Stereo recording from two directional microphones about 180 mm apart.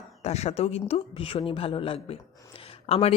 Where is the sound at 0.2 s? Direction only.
40° left (ahead or behind).